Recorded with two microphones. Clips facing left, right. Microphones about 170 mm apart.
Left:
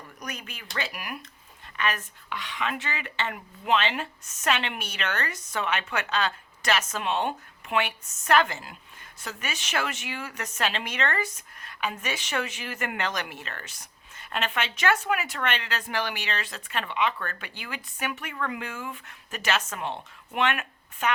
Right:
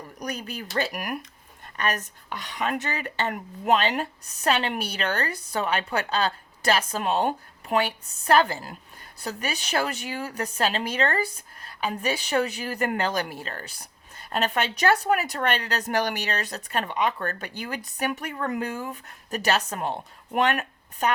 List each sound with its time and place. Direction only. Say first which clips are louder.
0.2 s a woman's voice: right 7 dB; 35° right (ahead or behind)